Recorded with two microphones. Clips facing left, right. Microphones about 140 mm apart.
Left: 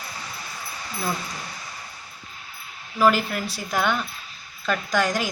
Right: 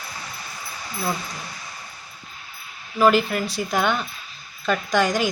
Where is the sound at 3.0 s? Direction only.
20° right (ahead or behind).